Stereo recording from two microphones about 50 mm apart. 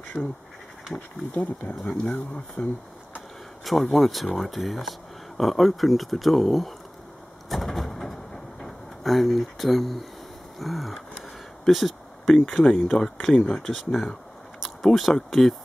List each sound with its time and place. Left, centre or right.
0.2 s speech: centre
1.9 s speech: centre
3.6 s speech: centre
7.4 s a sound: centre
10.6 s speech: centre
11.6 s a sound: centre
12.6 s speech: centre
13.7 s speech: centre